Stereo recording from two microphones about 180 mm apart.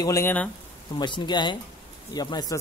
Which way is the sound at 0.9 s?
25° left (ahead or behind).